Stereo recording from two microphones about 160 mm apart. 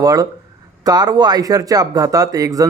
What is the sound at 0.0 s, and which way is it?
Speech, 20° right (ahead or behind).